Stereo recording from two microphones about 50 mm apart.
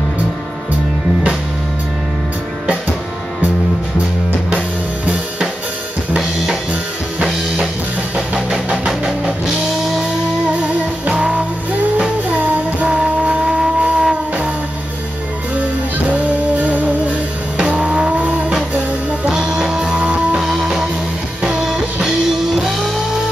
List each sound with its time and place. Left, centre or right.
4.5 s drum kit: right
6.1 s drum kit: centre
8.4 s music: centre
11.1 s music: right
16.1 s music: right
17.6 s car: right
19.2 s music: centre
20.3 s music: centre